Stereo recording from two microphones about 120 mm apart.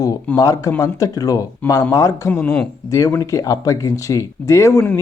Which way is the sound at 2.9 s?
30° left (ahead or behind).